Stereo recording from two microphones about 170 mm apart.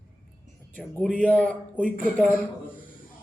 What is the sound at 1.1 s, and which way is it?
Speech, 10° left (ahead or behind).